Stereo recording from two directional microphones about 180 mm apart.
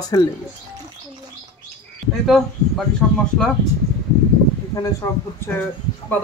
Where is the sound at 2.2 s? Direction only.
Centre (ahead or behind).